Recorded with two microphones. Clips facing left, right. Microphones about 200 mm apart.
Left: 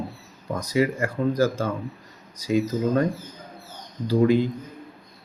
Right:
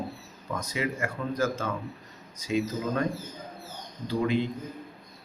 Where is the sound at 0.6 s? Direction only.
35° left (ahead or behind).